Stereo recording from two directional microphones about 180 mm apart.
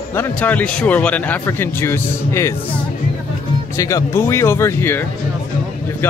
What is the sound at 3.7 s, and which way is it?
Speech, 15° left (ahead or behind).